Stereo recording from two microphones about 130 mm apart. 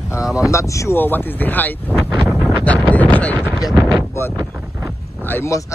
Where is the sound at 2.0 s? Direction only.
10° right (ahead or behind).